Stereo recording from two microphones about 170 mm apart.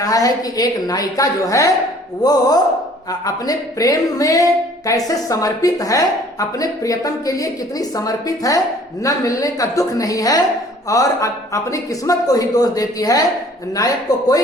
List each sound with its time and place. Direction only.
0.0 s speech: 20° left (ahead or behind)